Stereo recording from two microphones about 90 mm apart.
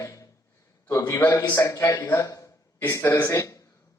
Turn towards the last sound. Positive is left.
turn(degrees=40)  # may be behind; listen again after turning